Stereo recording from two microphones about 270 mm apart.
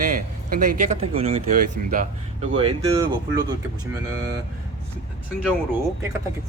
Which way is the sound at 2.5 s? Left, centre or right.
Centre.